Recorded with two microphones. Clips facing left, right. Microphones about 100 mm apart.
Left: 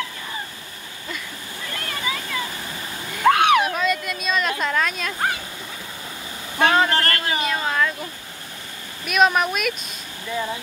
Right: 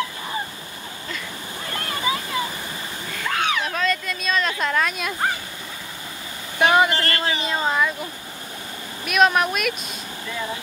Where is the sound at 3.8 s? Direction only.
5° left (ahead or behind).